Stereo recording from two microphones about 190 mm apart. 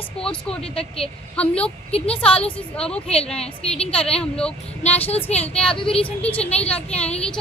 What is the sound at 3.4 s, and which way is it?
Speech, 30° left (ahead or behind).